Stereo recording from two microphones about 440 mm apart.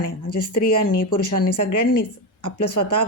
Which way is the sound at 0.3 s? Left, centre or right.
Left.